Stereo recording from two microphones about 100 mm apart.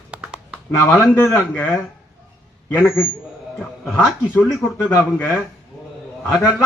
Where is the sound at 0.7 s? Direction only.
30° left (ahead or behind).